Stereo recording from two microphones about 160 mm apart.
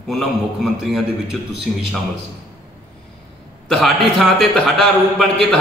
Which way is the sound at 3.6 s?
Centre (ahead or behind).